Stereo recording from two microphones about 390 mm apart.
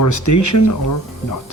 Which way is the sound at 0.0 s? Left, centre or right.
Left.